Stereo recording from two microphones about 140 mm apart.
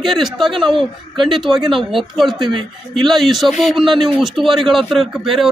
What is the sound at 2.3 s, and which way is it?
Speech, 35° right (ahead or behind).